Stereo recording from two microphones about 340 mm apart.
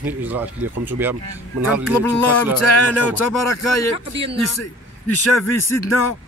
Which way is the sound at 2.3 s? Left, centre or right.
Left.